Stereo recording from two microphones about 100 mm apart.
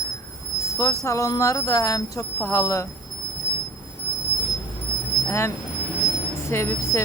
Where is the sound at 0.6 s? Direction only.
30° left (ahead or behind).